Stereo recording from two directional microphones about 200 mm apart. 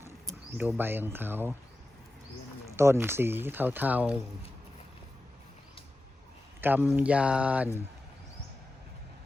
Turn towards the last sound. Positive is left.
turn(degrees=-5)  # may be behind; listen again after turning